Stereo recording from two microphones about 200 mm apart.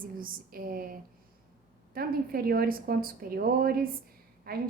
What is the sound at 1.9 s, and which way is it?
A woman's voice, 45° right (ahead or behind).